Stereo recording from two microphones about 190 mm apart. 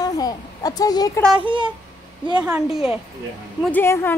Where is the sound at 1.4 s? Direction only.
25° right (ahead or behind).